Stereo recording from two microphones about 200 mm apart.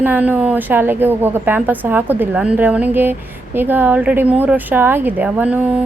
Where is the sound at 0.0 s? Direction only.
10° right (ahead or behind).